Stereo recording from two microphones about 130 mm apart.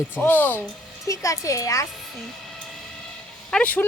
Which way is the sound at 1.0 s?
25° left (ahead or behind).